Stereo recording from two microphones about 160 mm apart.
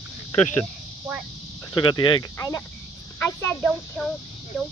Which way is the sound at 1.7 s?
30° left (ahead or behind).